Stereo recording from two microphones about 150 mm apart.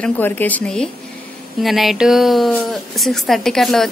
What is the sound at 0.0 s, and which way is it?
A woman's voice, 10° left (ahead or behind).